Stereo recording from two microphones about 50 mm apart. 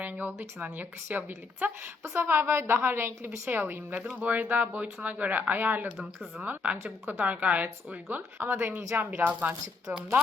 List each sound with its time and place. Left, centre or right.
0.0 s speech: right
2.1 s a woman's voice: right
3.5 s speech: right
4.2 s speech: right
8.4 s speech: right
9.1 s speech: right